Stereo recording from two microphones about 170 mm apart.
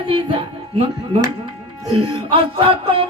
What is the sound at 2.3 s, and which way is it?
Music, 30° right (ahead or behind).